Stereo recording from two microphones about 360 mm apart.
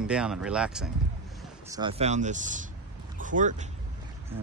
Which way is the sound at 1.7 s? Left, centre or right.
Centre.